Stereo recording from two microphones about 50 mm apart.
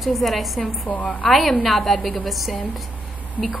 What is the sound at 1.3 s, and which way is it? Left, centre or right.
A woman's voice, centre.